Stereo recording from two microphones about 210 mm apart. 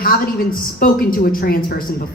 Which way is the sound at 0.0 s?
45° left (ahead or behind).